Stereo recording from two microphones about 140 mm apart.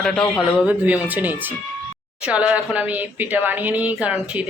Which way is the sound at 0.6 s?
10° right (ahead or behind).